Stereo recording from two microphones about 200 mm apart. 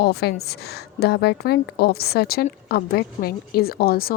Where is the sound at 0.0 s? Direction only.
50° left (ahead or behind).